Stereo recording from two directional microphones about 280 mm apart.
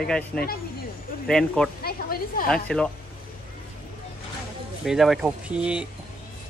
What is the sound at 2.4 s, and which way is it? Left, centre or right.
Speech, centre.